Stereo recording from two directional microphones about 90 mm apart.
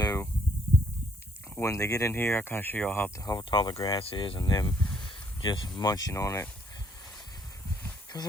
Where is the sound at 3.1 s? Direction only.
45° left (ahead or behind).